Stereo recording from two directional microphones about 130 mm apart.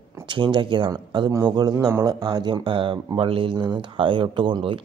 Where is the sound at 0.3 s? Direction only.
35° right (ahead or behind).